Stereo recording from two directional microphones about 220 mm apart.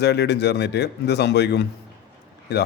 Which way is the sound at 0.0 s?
50° left (ahead or behind).